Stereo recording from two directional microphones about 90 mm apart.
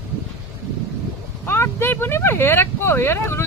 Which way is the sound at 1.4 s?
25° left (ahead or behind).